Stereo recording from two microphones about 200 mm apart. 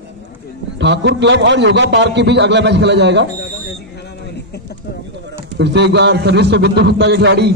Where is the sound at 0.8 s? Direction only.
60° right (ahead or behind).